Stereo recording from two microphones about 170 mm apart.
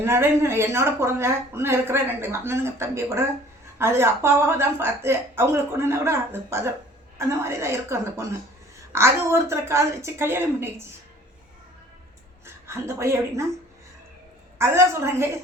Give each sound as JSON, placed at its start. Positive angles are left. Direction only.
{"t": 0.0, "sound": "speech", "side_deg": -15}
{"t": 12.6, "sound": "speech", "side_deg": -15}
{"t": 14.6, "sound": "speech", "side_deg": -15}